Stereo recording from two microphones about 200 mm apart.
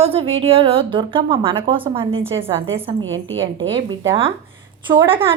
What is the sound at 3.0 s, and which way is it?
Speech, 75° right (ahead or behind).